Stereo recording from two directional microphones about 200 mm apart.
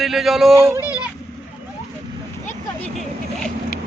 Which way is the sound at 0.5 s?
10° right (ahead or behind).